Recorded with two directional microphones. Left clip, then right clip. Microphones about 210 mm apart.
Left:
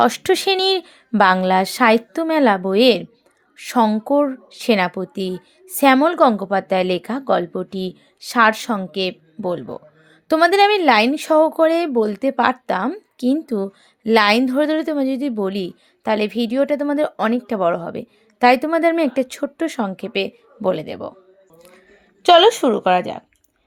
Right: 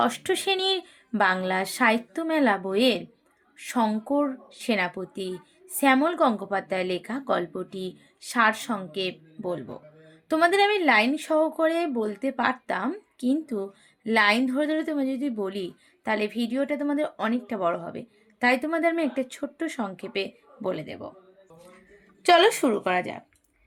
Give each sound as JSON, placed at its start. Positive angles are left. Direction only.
{"t": 0.0, "sound": "a woman's voice", "side_deg": 40}
{"t": 22.2, "sound": "a woman's voice", "side_deg": 40}